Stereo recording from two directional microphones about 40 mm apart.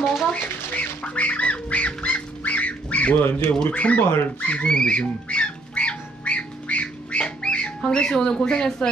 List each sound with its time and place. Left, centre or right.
0.0 s a sound: centre
0.3 s speech: left
2.0 s bird: left
3.7 s speech: left
4.6 s speech: centre
4.9 s bird: left